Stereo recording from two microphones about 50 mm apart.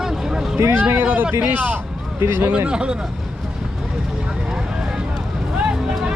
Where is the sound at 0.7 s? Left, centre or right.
Right.